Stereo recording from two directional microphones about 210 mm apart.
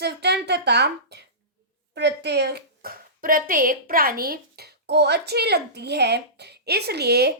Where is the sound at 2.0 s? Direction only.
55° right (ahead or behind).